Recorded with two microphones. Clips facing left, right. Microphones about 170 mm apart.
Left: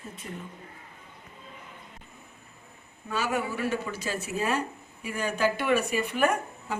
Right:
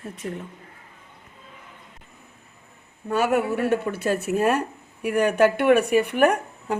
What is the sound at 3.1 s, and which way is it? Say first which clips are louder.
Speech: right 8 dB; 60° right (ahead or behind).